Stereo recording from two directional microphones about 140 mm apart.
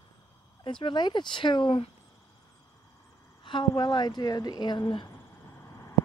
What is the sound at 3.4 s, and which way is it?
Speech, 35° left (ahead or behind).